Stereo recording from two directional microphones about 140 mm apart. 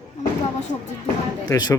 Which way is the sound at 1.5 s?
30° left (ahead or behind).